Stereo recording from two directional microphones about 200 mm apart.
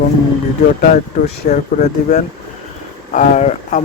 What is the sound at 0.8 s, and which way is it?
Speech, 40° left (ahead or behind).